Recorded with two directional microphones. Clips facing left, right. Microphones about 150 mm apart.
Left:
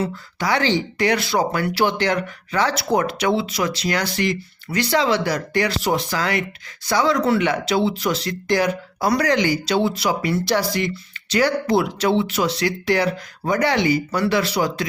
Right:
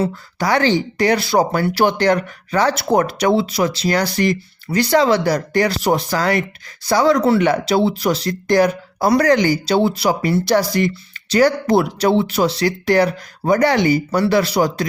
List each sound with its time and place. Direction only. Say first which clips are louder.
0.0 s speech: right 4 dB; 40° right (ahead or behind)
12.8 s speech: right 6 dB; 45° right (ahead or behind)